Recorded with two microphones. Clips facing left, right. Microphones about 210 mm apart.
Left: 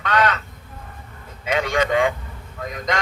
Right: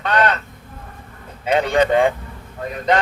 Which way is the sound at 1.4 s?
35° right (ahead or behind).